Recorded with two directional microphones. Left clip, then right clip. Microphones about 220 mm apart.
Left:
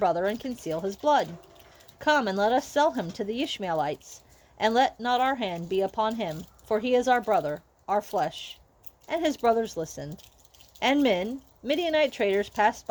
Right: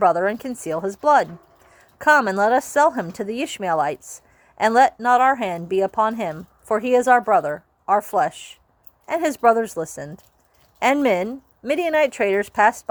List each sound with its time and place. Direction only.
0.0 s speech: 20° right (ahead or behind)
2.4 s a woman's voice: 25° right (ahead or behind)
9.0 s speech: 15° right (ahead or behind)
9.7 s speech: 30° right (ahead or behind)
10.8 s speech: 20° right (ahead or behind)